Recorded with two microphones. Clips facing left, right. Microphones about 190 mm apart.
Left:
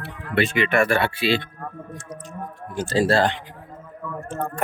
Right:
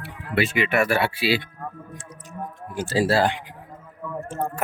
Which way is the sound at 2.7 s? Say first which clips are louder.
Left 2 dB; 5° right (ahead or behind).